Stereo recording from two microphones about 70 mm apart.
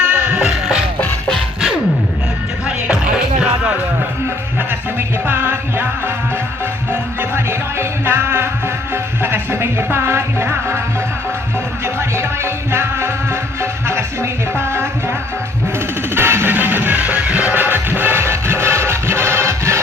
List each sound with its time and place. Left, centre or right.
0.0 s music: centre
2.6 s music: centre
4.9 s music: right
11.9 s music: right
16.1 s music: right